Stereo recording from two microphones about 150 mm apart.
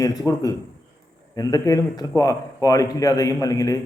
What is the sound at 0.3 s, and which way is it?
Speech, 20° left (ahead or behind).